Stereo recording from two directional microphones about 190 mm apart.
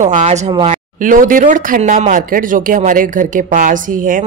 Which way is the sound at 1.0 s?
45° right (ahead or behind).